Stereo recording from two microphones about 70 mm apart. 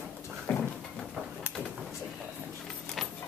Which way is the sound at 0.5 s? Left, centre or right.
Left.